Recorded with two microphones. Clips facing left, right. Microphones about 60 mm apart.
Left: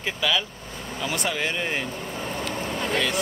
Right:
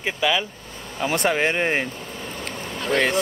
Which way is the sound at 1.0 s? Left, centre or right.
Right.